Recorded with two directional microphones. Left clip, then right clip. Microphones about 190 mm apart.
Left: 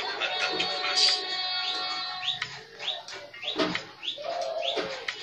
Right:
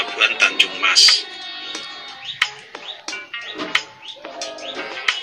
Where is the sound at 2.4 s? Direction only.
45° right (ahead or behind).